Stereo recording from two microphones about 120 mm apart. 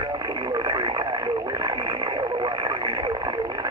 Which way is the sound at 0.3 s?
40° right (ahead or behind).